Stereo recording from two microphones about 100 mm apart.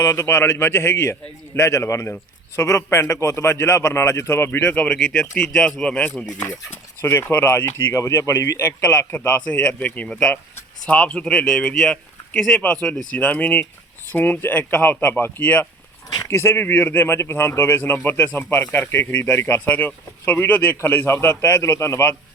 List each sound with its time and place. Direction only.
0.0 s a man's voice: 30° left (ahead or behind); by 6.5 s 15° left (ahead or behind)
7.0 s a man's voice: 25° left (ahead or behind)
9.5 s a man's voice: 10° left (ahead or behind)
16.1 s a man's voice: 25° left (ahead or behind)